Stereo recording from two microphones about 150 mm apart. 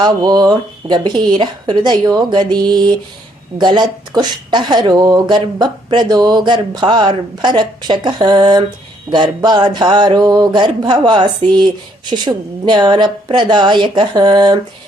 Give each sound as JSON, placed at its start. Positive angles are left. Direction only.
{"t": 0.0, "sound": "a woman's voice", "side_deg": -25}